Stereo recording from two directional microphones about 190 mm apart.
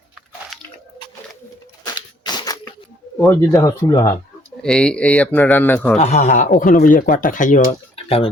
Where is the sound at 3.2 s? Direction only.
15° left (ahead or behind).